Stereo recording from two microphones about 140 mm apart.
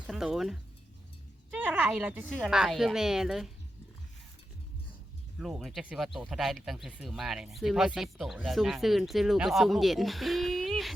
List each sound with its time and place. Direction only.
0.1 s speech: 5° right (ahead or behind)
1.5 s a sound: 10° right (ahead or behind)
2.4 s speech: centre (ahead or behind)
5.4 s speech: centre (ahead or behind)